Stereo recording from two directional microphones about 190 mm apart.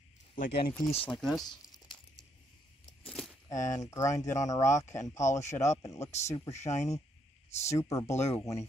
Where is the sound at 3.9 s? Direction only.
15° left (ahead or behind).